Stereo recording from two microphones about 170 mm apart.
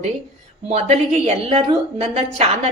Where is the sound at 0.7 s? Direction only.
40° right (ahead or behind).